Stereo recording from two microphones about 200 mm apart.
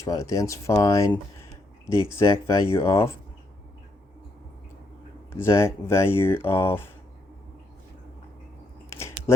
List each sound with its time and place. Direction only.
0.0 s speech: 15° left (ahead or behind)
5.3 s speech: 10° left (ahead or behind)
8.9 s chewing: 15° left (ahead or behind)